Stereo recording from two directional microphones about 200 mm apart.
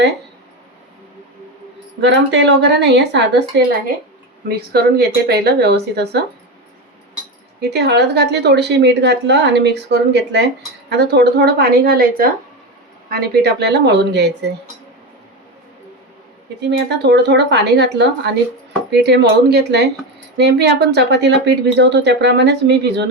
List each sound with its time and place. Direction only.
2.0 s a woman's voice: 60° right (ahead or behind)
4.4 s speech: 50° right (ahead or behind)
7.6 s a woman's voice: 55° right (ahead or behind)
16.6 s a woman's voice: 60° right (ahead or behind)